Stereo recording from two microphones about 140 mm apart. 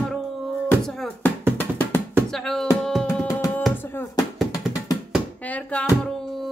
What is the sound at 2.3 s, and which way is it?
Music, 5° left (ahead or behind).